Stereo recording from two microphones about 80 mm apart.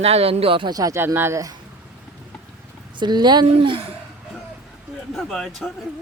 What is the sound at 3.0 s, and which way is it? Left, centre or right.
Speech, right.